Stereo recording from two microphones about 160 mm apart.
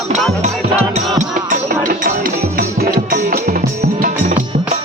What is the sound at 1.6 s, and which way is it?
Music, 65° right (ahead or behind).